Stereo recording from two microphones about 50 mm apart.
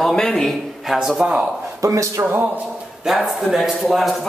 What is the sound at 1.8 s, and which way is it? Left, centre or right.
Speech, right.